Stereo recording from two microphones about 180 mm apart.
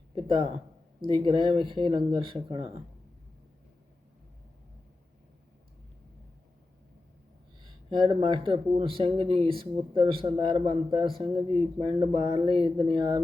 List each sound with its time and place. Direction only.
1.0 s speech: 25° right (ahead or behind)
7.6 s speech: 25° right (ahead or behind)